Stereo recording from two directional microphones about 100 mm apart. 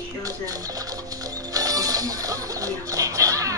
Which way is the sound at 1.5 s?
35° right (ahead or behind).